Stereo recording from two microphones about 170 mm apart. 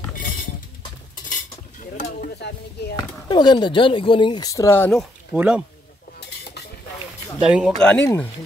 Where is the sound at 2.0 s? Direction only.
65° left (ahead or behind).